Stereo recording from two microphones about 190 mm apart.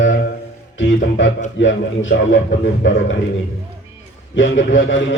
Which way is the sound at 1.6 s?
75° left (ahead or behind).